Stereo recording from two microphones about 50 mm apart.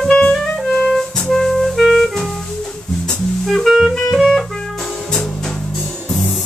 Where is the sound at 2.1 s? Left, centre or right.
Centre.